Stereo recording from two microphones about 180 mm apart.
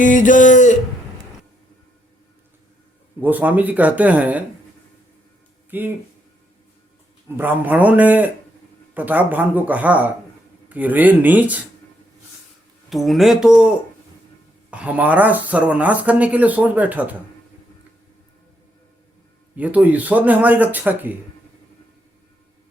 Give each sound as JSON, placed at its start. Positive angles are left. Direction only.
{"t": 0.0, "sound": "speech", "side_deg": 45}
{"t": 3.2, "sound": "speech", "side_deg": -10}
{"t": 5.7, "sound": "speech", "side_deg": -10}
{"t": 7.3, "sound": "speech", "side_deg": -10}
{"t": 12.9, "sound": "speech", "side_deg": 0}
{"t": 14.7, "sound": "speech", "side_deg": -10}
{"t": 19.5, "sound": "speech", "side_deg": -10}